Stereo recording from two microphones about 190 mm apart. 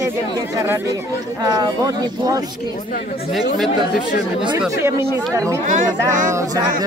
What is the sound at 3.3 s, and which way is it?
Speech, centre (ahead or behind).